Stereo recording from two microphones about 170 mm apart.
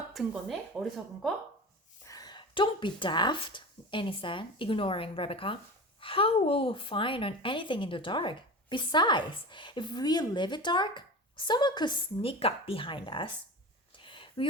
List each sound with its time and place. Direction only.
0.1 s speech: centre (ahead or behind)
2.0 s a woman's voice: 20° left (ahead or behind)
13.9 s a sound: 30° left (ahead or behind)